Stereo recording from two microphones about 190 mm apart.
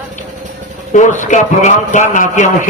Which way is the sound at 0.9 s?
40° left (ahead or behind).